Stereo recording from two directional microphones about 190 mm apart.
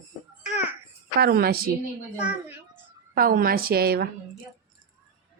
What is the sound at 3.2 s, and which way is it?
Speech, 50° right (ahead or behind).